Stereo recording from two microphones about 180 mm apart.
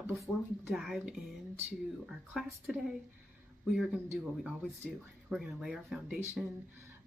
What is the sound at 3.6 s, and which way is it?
Speech, 5° right (ahead or behind).